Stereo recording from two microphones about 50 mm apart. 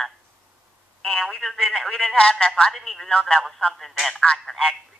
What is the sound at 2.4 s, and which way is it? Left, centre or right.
Speech, centre.